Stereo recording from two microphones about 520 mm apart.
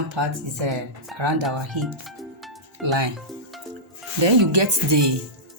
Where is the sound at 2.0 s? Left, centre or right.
Centre.